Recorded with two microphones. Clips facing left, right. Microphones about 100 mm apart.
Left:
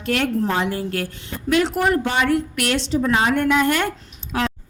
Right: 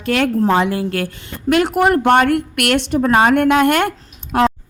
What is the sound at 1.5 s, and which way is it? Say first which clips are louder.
A woman's voice: right 4 dB; 55° right (ahead or behind).